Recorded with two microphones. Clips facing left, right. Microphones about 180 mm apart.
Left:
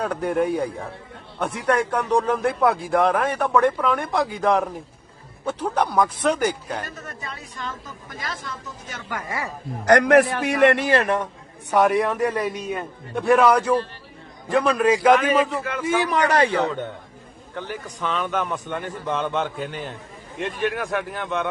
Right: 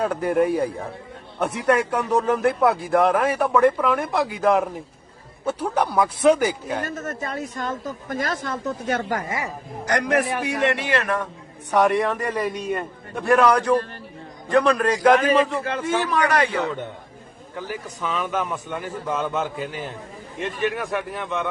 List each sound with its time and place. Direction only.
0.0 s speech: 5° right (ahead or behind)
6.8 s speech: 45° right (ahead or behind)
9.8 s a man's voice: 65° left (ahead or behind)
10.8 s a man's voice: 30° left (ahead or behind)
11.7 s speech: centre (ahead or behind)
16.0 s a man's voice: 20° left (ahead or behind); by 16.7 s 35° left (ahead or behind)
17.5 s speech: 5° right (ahead or behind)